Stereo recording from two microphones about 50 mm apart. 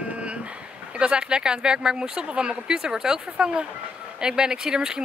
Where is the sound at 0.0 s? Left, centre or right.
Right.